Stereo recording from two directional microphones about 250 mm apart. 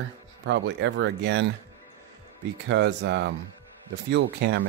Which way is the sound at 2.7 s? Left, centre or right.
Right.